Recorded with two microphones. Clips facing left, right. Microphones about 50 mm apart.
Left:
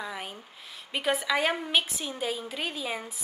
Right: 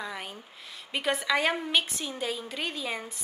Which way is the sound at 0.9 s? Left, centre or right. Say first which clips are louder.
Even; centre.